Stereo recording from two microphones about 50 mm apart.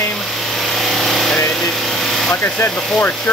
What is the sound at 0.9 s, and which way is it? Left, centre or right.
Vehicle, centre.